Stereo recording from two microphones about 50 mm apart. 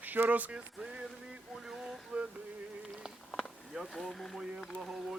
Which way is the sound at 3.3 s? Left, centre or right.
Centre.